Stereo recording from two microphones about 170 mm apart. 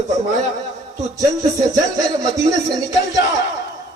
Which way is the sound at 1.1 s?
20° right (ahead or behind).